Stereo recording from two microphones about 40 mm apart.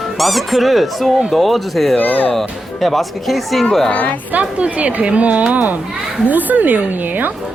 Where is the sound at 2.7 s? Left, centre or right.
Centre.